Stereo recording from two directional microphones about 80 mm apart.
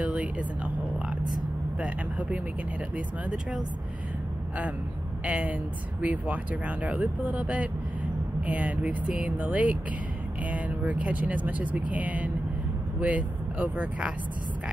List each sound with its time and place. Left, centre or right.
0.0 s a sound: centre
1.8 s speech: centre
5.2 s speech: centre